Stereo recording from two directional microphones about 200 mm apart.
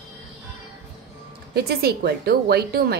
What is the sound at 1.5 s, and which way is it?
A woman's voice, 50° right (ahead or behind).